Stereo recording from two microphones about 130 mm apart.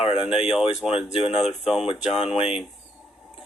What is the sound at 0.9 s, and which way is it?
Speech, 45° left (ahead or behind).